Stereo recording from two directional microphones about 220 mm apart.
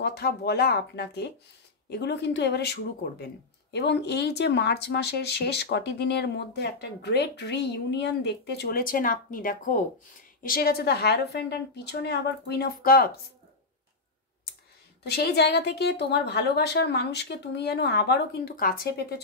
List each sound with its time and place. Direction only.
0.0 s speech: 45° left (ahead or behind)
15.0 s speech: 45° left (ahead or behind)